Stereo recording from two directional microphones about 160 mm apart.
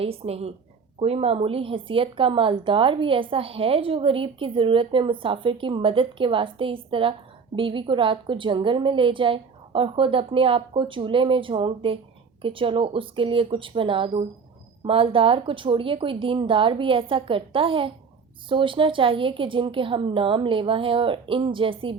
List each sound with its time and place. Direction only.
0.0 s a woman's voice: 40° right (ahead or behind)